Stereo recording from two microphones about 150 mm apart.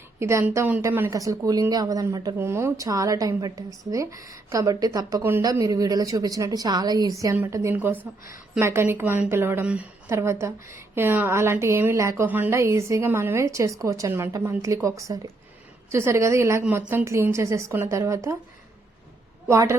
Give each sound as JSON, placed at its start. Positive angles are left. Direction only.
{"t": 0.2, "sound": "a woman's voice", "side_deg": -20}
{"t": 19.5, "sound": "a woman's voice", "side_deg": -20}